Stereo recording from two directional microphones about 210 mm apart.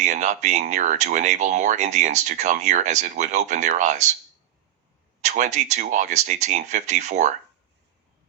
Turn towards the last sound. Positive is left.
turn(degrees=-35)  # may be behind; listen again after turning